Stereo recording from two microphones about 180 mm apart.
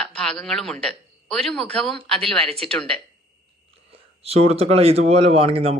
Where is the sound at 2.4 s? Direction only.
35° right (ahead or behind).